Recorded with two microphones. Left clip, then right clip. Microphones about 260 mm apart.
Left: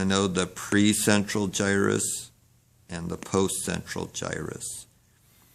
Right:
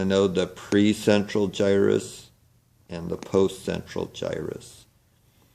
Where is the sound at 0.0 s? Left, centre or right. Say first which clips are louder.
Right 4 dB; left.